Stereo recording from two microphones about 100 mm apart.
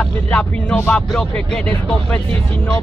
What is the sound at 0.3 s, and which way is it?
Speech, 15° left (ahead or behind).